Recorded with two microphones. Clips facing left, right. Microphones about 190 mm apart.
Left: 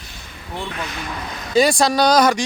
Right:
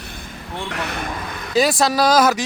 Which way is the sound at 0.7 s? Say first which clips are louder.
Right 3 dB; 65° right (ahead or behind).